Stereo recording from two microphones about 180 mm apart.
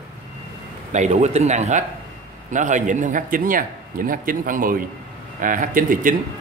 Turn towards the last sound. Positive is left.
turn(degrees=-50)  # may be behind; listen again after turning